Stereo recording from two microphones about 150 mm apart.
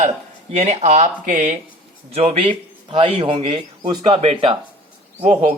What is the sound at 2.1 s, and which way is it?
A man's voice, 40° right (ahead or behind).